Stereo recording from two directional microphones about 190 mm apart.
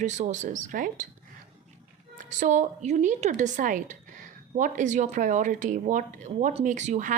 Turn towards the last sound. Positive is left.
turn(degrees=-40)  # may be behind; listen again after turning